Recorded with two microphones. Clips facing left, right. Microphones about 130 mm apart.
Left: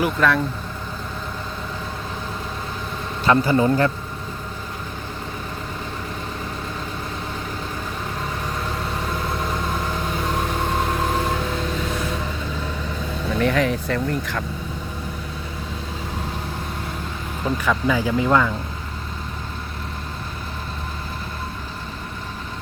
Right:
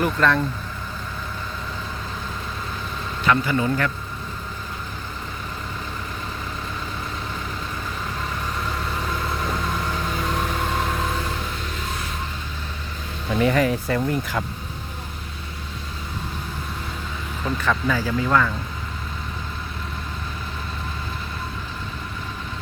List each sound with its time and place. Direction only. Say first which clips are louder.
0.0 s speech: left 1 dB; 5° left (ahead or behind)
3.2 s a man's voice: left 4 dB; 35° left (ahead or behind)
13.4 s speech: right 1 dB; 5° right (ahead or behind)
17.4 s speech: left 2 dB; 10° left (ahead or behind)